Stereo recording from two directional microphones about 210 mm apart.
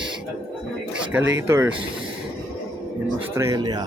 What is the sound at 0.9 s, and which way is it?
Speech, 5° right (ahead or behind).